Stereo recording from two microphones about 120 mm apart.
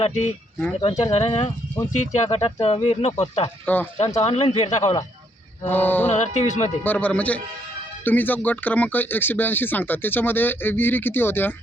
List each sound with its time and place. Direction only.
0.0 s speech: 60° left (ahead or behind)
1.9 s speech: 75° left (ahead or behind); by 4.7 s 55° left (ahead or behind)
5.6 s speech: 15° left (ahead or behind)
6.1 s speech: 70° left (ahead or behind)
6.8 s speech: 15° left (ahead or behind)